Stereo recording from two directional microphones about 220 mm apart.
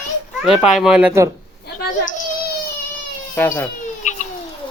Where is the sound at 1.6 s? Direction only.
45° left (ahead or behind).